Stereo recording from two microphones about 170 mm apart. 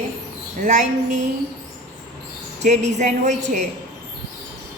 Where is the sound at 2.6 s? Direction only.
45° right (ahead or behind).